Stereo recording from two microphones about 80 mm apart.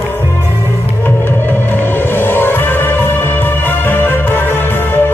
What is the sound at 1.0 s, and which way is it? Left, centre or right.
Music, left.